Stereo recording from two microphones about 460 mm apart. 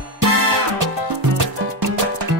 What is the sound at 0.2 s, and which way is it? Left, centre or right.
Music, right.